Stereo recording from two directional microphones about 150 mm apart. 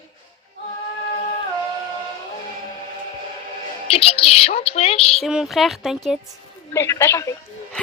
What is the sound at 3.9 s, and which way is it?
A woman's voice, 40° left (ahead or behind).